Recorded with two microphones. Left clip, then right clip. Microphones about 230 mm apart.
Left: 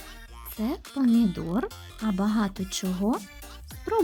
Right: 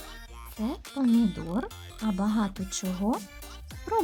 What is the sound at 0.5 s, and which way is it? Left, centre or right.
Speech, centre.